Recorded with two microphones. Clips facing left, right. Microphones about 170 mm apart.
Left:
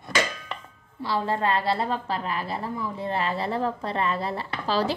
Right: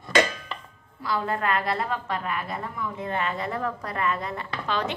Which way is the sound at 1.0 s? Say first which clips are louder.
Left 2 dB; 30° left (ahead or behind).